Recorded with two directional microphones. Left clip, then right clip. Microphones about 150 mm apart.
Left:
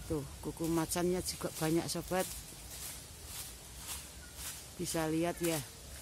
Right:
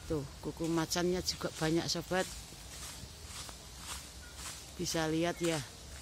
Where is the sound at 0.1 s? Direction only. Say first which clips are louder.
Right 1 dB; centre (ahead or behind).